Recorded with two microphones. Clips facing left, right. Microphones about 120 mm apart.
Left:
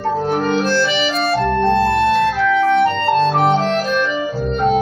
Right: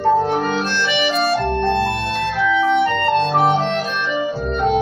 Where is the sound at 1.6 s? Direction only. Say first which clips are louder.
Left 3 dB; 45° left (ahead or behind).